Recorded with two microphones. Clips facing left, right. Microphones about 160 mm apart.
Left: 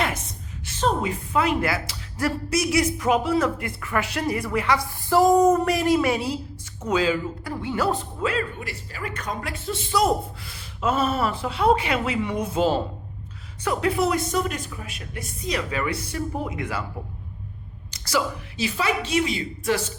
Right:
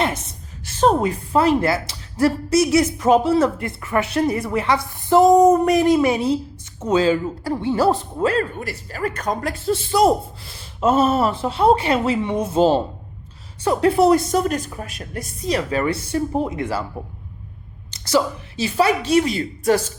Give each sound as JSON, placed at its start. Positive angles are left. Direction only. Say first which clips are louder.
{"t": 0.8, "sound": "speech", "louder": "right 7 dB", "side_deg": -45}
{"t": 18.0, "sound": "speech", "louder": "right 6 dB", "side_deg": -25}